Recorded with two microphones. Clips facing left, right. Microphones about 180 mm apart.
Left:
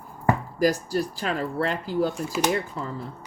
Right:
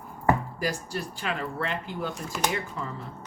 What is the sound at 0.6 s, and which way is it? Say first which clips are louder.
Speech: left 8 dB; 40° left (ahead or behind).